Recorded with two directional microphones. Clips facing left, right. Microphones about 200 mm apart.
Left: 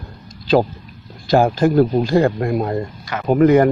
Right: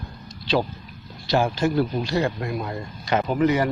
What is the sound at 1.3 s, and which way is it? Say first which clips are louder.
Speech: left 7 dB; 50° left (ahead or behind).